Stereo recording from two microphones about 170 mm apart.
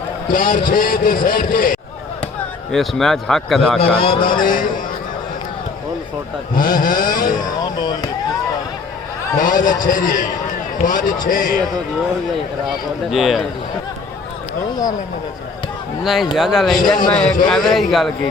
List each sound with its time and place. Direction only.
0.3 s a man's voice: 55° left (ahead or behind)
2.7 s speech: centre (ahead or behind)
3.8 s a man's voice: 35° left (ahead or behind)
4.2 s a man's voice: 55° left (ahead or behind)
6.6 s a man's voice: 55° left (ahead or behind)
7.4 s speech: 25° left (ahead or behind)
9.4 s a man's voice: 50° left (ahead or behind)
12.6 s speech: centre (ahead or behind)
16.0 s speech: centre (ahead or behind)